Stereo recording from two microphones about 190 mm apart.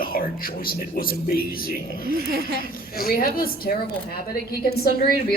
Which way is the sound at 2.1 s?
55° right (ahead or behind).